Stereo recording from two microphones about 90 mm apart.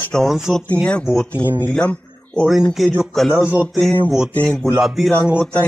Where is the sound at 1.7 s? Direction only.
10° left (ahead or behind).